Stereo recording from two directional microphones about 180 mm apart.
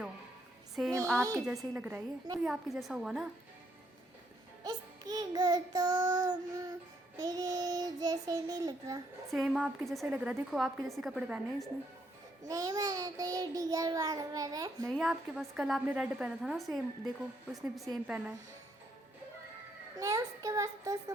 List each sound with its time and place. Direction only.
1.1 s a child's voice: 15° right (ahead or behind)
1.5 s a child's voice: 5° right (ahead or behind)
4.6 s child singing: 20° right (ahead or behind)
9.3 s a woman's voice: centre (ahead or behind)
12.5 s child singing: 20° right (ahead or behind)
14.8 s a woman's voice: centre (ahead or behind)
17.9 s a woman's voice: 5° right (ahead or behind)
20.0 s a child's voice: 20° right (ahead or behind)